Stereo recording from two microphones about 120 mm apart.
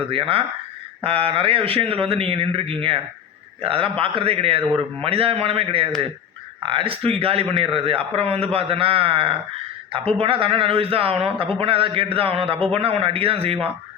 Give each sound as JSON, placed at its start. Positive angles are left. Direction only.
{"t": 0.1, "sound": "a man's voice", "side_deg": -50}